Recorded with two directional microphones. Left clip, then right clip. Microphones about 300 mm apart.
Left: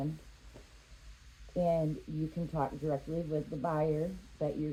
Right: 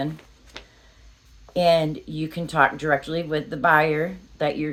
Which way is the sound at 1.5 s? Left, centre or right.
Right.